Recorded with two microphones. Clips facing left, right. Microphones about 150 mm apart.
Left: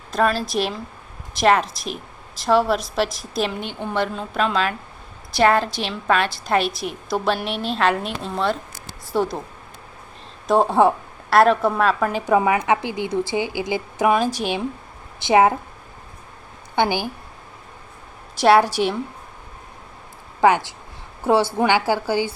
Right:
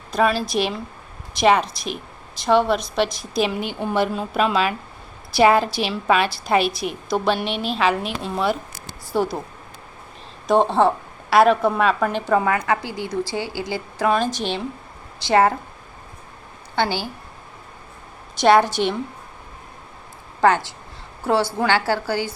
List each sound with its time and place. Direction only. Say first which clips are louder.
0.1 s a woman's voice: right 1 dB; centre (ahead or behind)
10.4 s a woman's voice: left 1 dB; 5° left (ahead or behind)
11.3 s a woman's voice: even; centre (ahead or behind)
12.2 s a woman's voice: left 4 dB; 15° left (ahead or behind)
16.7 s a woman's voice: left 2 dB; 15° left (ahead or behind)
18.3 s a woman's voice: even; 5° left (ahead or behind)
21.6 s a woman's voice: left 1 dB; 15° left (ahead or behind)